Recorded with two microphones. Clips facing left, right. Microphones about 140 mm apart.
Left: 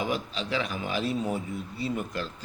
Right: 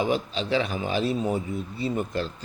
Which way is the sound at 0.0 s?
30° right (ahead or behind).